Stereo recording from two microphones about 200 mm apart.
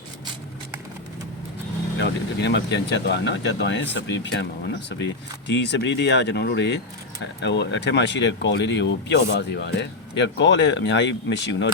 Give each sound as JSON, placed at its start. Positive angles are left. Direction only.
{"t": 2.0, "sound": "speech", "side_deg": 60}